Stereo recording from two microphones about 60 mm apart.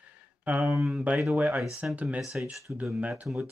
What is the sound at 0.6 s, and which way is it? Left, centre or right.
Speech, centre.